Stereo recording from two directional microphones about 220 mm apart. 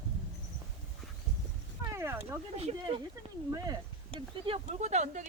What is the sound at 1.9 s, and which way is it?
Speech, 10° right (ahead or behind).